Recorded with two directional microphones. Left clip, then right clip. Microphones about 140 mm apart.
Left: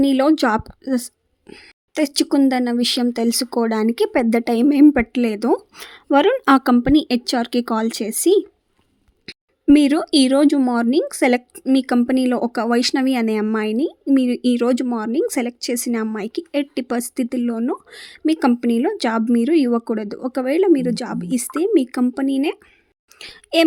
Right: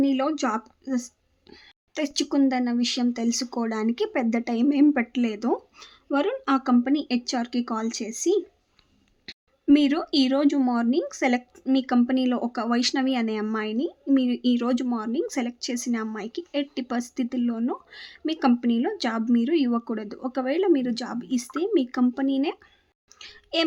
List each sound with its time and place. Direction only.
0.0 s speech: 50° left (ahead or behind)
1.5 s speech: 30° left (ahead or behind)
5.7 s speech: 55° left (ahead or behind)
6.7 s speech: 45° left (ahead or behind)
9.2 s a sound: 30° left (ahead or behind)
9.7 s speech: 40° left (ahead or behind)
23.1 s a sound: 45° left (ahead or behind)